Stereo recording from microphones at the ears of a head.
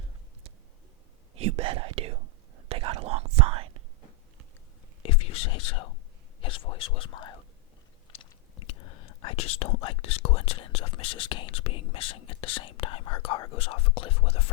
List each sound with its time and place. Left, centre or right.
1.4 s whispering: right
5.0 s whispering: left